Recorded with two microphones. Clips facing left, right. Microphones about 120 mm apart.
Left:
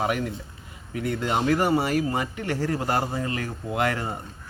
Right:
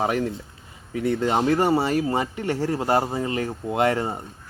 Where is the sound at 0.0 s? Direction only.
35° right (ahead or behind).